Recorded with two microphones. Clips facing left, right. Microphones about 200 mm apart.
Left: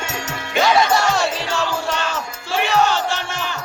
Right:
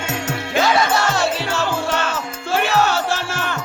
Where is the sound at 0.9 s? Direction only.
Centre (ahead or behind).